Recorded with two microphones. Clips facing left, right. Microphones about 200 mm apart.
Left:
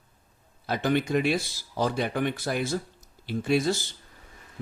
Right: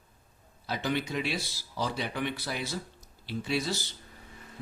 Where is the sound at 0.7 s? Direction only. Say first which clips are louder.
Left 7 dB; 50° left (ahead or behind).